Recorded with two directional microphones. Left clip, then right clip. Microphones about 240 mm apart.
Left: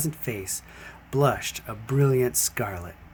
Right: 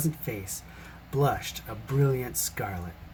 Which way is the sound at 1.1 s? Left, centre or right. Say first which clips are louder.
Left 4 dB; left.